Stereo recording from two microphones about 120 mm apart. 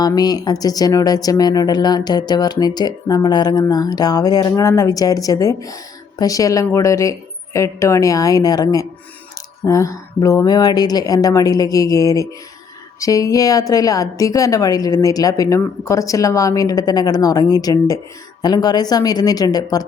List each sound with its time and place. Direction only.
0.0 s a woman's voice: 35° left (ahead or behind)